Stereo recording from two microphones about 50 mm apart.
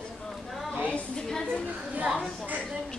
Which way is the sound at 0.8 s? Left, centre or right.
Left.